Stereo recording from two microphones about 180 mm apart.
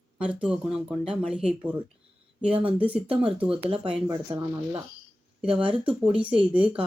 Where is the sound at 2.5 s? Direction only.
30° right (ahead or behind).